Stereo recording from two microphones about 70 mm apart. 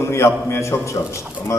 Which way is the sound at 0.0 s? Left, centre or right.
Left.